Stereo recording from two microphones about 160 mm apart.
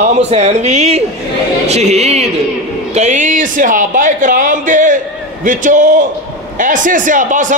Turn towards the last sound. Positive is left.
turn(degrees=-55)  # may be behind; listen again after turning